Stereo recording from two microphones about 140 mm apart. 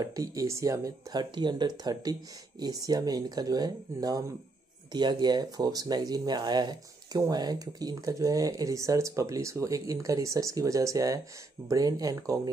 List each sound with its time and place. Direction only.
0.0 s speech: 25° right (ahead or behind)